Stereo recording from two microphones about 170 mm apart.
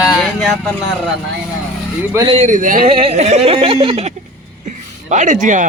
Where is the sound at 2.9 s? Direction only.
35° right (ahead or behind).